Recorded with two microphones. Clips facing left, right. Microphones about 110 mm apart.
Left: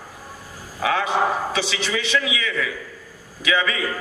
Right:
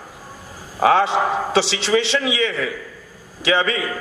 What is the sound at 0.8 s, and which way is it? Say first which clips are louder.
A man's voice: right 5 dB; 30° right (ahead or behind).